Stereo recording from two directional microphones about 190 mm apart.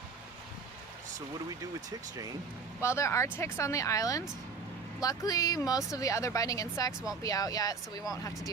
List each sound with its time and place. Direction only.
1.9 s speech: 20° right (ahead or behind)
2.8 s speech: 15° left (ahead or behind)